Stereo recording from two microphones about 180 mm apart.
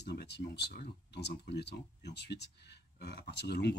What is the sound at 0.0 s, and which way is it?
Speech, 70° left (ahead or behind).